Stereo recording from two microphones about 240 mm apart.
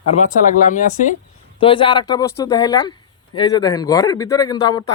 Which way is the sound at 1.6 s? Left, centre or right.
Left.